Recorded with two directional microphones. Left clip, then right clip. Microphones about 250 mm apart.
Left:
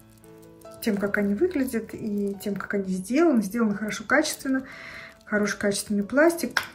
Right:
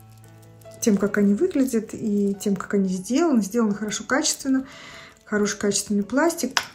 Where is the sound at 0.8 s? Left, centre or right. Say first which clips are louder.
Right 4 dB; centre.